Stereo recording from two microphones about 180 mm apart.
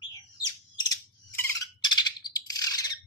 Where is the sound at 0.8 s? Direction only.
20° left (ahead or behind).